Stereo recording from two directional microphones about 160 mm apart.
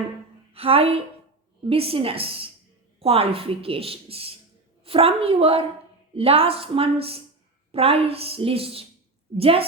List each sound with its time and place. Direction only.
0.5 s speech: 35° right (ahead or behind)